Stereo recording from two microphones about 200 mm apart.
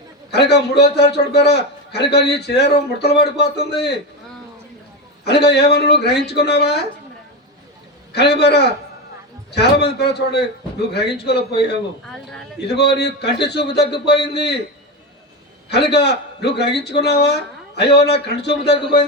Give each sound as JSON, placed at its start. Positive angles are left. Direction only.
{"t": 0.3, "sound": "a man's voice", "side_deg": 55}
{"t": 5.2, "sound": "a man's voice", "side_deg": 55}
{"t": 8.1, "sound": "a man's voice", "side_deg": 55}
{"t": 15.7, "sound": "a man's voice", "side_deg": 55}